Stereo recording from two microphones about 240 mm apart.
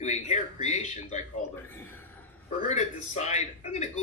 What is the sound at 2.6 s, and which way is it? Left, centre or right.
Speech, left.